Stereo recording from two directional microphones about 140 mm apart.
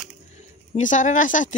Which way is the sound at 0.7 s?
65° left (ahead or behind).